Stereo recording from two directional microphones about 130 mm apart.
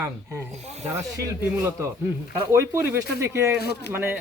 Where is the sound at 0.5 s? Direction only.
55° right (ahead or behind).